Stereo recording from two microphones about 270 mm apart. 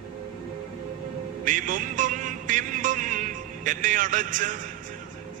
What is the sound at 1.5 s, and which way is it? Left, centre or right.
Music, right.